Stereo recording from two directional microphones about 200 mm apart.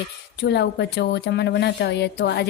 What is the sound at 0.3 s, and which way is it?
A woman's voice, 60° left (ahead or behind).